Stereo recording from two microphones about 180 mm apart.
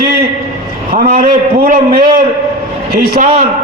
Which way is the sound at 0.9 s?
50° right (ahead or behind).